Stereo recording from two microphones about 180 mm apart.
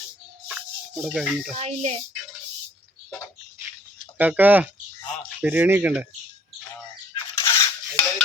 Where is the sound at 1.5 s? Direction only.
35° right (ahead or behind).